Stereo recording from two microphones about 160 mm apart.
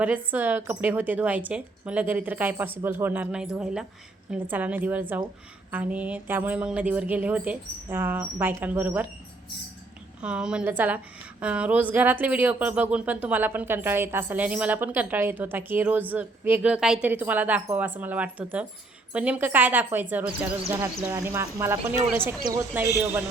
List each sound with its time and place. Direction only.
0.0 s a woman's voice: 10° right (ahead or behind)
10.2 s a woman's voice: 5° right (ahead or behind)